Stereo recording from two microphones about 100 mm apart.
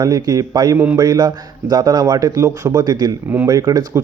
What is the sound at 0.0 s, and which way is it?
Speech, 35° right (ahead or behind).